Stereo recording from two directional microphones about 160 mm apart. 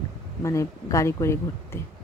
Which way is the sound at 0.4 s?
20° left (ahead or behind).